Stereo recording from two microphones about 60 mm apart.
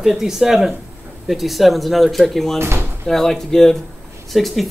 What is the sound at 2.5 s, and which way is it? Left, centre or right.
Speech, right.